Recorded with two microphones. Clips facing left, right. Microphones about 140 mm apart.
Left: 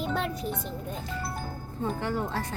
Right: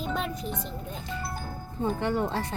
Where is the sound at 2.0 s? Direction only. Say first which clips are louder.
Right 4 dB; 20° right (ahead or behind).